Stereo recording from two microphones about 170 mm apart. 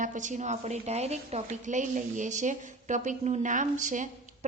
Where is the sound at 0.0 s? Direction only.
50° right (ahead or behind).